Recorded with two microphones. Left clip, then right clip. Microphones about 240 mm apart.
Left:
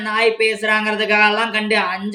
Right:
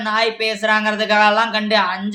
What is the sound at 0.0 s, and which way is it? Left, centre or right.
Speech, centre.